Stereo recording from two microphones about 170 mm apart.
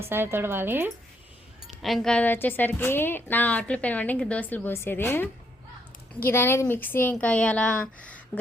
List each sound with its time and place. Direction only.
0.0 s speech: 15° right (ahead or behind)
1.6 s a woman's voice: centre (ahead or behind)